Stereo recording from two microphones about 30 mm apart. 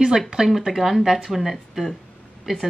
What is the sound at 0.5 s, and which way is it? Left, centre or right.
Speech, centre.